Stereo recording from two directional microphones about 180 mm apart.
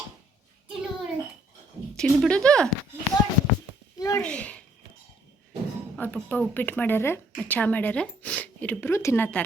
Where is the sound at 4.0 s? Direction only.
15° left (ahead or behind).